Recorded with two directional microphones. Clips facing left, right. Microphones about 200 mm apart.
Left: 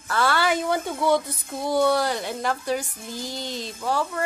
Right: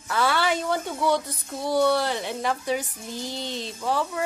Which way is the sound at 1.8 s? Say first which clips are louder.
Left 1 dB; 5° left (ahead or behind).